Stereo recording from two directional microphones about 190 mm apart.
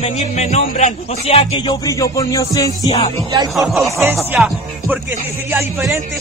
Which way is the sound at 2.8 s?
30° left (ahead or behind).